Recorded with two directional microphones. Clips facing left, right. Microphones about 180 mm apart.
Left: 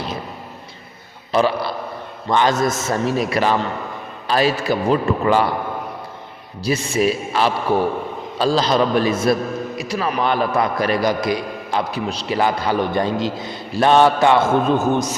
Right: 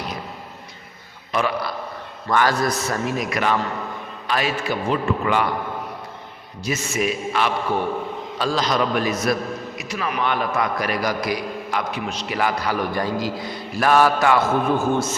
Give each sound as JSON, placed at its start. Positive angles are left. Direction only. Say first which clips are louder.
{"t": 1.3, "sound": "a man's voice", "louder": "left 5 dB", "side_deg": 30}
{"t": 6.6, "sound": "a man's voice", "louder": "left 5 dB", "side_deg": 35}